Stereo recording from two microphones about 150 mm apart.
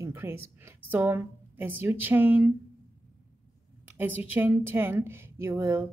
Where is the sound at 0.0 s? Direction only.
15° right (ahead or behind).